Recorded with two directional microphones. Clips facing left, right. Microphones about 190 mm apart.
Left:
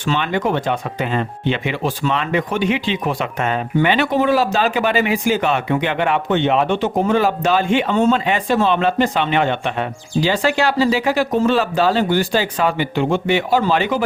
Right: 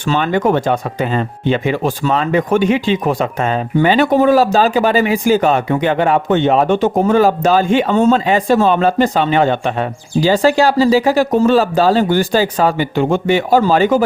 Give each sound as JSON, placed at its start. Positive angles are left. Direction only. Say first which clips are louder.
{"t": 0.1, "sound": "speech", "louder": "right 5 dB", "side_deg": -45}